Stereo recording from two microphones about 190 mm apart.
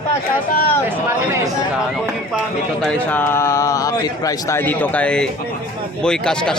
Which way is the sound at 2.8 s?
10° left (ahead or behind).